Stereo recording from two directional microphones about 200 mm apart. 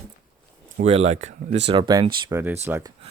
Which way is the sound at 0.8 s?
30° right (ahead or behind).